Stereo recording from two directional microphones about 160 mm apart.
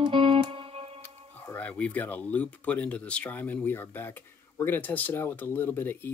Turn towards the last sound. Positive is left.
turn(degrees=10)  # may be behind; listen again after turning